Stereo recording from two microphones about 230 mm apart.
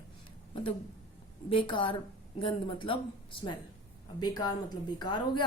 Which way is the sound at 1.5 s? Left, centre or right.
Left.